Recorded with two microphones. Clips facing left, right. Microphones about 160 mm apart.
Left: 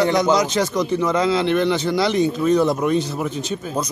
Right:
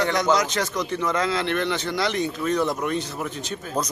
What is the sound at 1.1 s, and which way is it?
Speech, 25° left (ahead or behind).